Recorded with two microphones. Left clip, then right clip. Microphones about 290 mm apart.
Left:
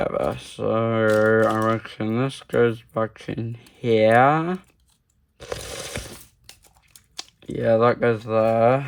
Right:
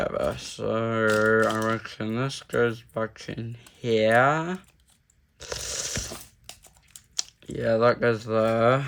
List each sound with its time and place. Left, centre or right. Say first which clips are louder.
0.0 s speech: left 3 dB; centre
5.4 s a sound: left 1 dB; centre
7.2 s speech: left 2 dB; centre